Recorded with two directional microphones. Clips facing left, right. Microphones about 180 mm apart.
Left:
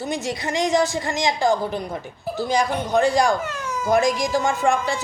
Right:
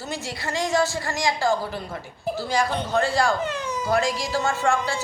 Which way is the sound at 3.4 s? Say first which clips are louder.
Right 1 dB; 15° right (ahead or behind).